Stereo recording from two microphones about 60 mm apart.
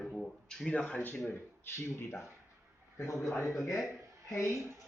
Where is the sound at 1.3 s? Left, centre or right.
Left.